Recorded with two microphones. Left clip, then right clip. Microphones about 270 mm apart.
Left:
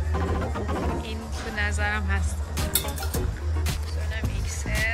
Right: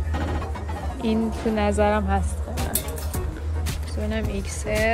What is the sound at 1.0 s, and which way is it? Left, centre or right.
Speech, centre.